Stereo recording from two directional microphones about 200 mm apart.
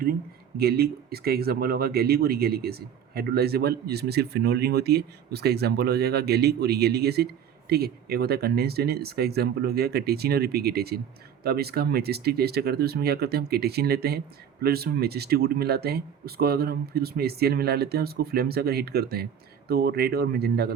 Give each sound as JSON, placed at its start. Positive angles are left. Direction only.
{"t": 0.0, "sound": "speech", "side_deg": -50}